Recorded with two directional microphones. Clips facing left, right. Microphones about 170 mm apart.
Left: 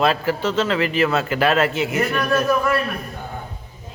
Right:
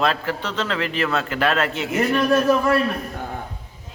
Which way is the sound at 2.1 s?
25° right (ahead or behind).